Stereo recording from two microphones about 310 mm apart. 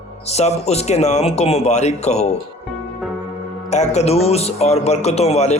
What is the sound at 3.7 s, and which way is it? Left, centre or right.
Speech, left.